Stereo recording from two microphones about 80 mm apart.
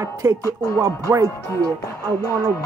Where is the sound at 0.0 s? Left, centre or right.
Right.